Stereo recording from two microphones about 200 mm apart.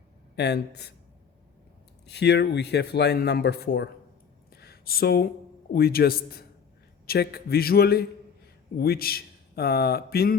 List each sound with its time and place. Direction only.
0.3 s speech: 55° left (ahead or behind)
2.0 s speech: 55° left (ahead or behind)